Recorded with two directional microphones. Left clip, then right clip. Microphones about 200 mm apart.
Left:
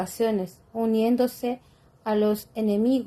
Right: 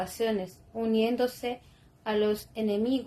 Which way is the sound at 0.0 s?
45° left (ahead or behind).